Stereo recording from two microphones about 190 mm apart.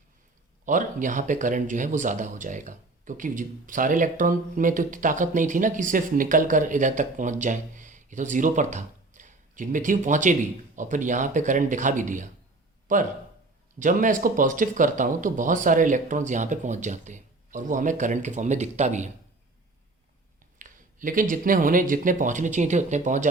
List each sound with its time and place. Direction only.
0.6 s speech: 45° right (ahead or behind)
20.6 s speech: 45° right (ahead or behind)